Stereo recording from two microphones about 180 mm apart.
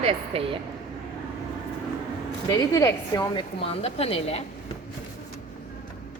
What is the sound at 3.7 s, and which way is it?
Speech, 35° left (ahead or behind).